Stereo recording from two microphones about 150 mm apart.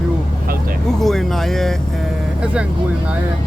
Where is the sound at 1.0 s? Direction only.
Centre (ahead or behind).